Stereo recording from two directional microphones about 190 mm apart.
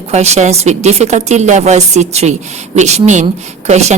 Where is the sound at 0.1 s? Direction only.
35° right (ahead or behind).